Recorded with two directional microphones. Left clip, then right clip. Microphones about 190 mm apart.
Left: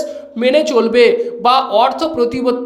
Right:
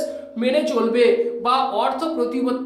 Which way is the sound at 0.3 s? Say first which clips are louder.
Left 8 dB; 45° left (ahead or behind).